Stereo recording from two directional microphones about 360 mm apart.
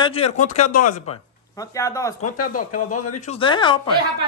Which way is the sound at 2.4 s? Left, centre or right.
Left.